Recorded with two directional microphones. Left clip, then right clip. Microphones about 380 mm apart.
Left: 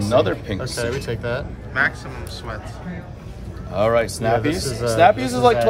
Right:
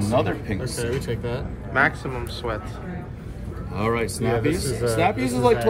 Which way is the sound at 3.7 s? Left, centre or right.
Centre.